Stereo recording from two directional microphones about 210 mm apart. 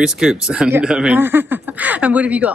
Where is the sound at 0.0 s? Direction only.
5° right (ahead or behind).